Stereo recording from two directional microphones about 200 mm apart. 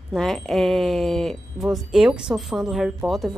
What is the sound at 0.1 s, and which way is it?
Speech, centre (ahead or behind).